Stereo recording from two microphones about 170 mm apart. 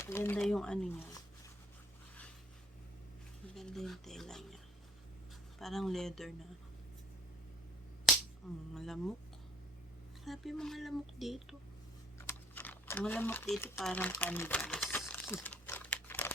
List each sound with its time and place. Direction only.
0.0 s speech: 15° left (ahead or behind)
0.3 s speech: 5° left (ahead or behind)
3.5 s speech: centre (ahead or behind)
8.1 s finger snapping: centre (ahead or behind)
8.7 s speech: centre (ahead or behind)
10.2 s speech: centre (ahead or behind)
12.3 s speech: 10° left (ahead or behind)
14.1 s crumpling: 10° left (ahead or behind)